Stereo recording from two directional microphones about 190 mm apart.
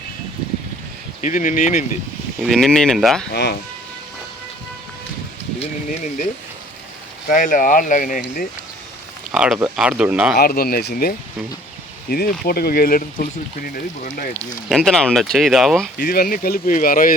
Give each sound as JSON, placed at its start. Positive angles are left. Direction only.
{"t": 1.2, "sound": "speech", "side_deg": 40}
{"t": 2.4, "sound": "speech", "side_deg": 0}
{"t": 3.3, "sound": "speech", "side_deg": 60}
{"t": 5.5, "sound": "speech", "side_deg": 40}
{"t": 7.3, "sound": "speech", "side_deg": 45}
{"t": 9.3, "sound": "speech", "side_deg": -5}
{"t": 10.3, "sound": "speech", "side_deg": 50}
{"t": 14.7, "sound": "speech", "side_deg": 0}
{"t": 16.0, "sound": "speech", "side_deg": 50}